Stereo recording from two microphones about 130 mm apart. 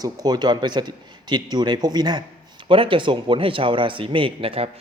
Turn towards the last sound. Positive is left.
turn(degrees=-45)  # may be behind; listen again after turning